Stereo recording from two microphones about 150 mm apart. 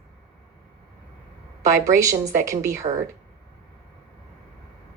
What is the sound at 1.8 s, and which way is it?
A woman's voice, 20° right (ahead or behind).